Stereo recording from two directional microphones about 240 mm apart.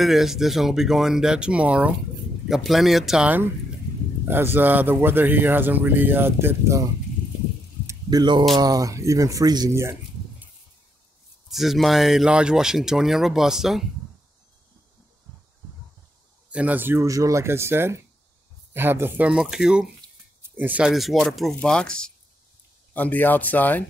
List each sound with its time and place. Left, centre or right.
0.0 s speech: centre
7.8 s a sound: centre
8.5 s speech: centre
11.5 s speech: centre
16.4 s speech: centre